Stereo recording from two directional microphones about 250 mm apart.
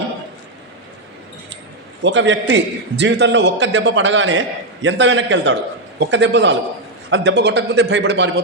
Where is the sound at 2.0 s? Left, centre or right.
Right.